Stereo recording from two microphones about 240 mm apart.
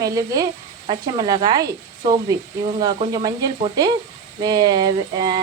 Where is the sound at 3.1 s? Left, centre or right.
Centre.